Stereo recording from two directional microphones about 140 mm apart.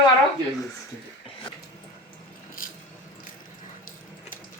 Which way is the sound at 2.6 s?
80° left.